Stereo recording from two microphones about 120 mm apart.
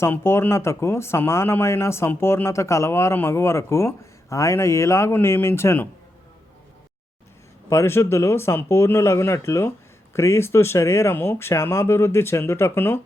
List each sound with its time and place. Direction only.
0.0 s speech: 20° left (ahead or behind)
7.7 s speech: 20° left (ahead or behind)